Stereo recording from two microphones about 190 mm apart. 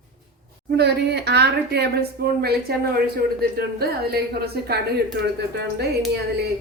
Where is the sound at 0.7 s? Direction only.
60° right (ahead or behind).